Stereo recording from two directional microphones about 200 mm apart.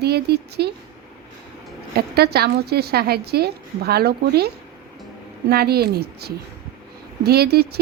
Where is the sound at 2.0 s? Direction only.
55° right (ahead or behind).